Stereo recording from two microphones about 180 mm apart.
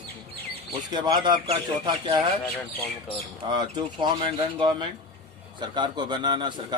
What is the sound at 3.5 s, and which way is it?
A man's voice, 25° right (ahead or behind).